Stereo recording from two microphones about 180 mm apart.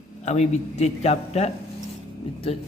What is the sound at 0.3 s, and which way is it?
Speech, 40° left (ahead or behind).